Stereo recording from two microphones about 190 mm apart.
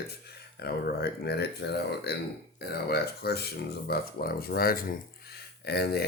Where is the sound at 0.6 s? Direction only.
55° left (ahead or behind).